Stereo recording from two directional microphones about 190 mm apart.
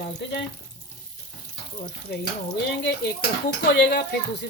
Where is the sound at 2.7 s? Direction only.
60° left (ahead or behind).